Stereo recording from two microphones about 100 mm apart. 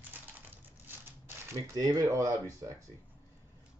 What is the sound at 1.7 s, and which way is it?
Speech, 40° right (ahead or behind).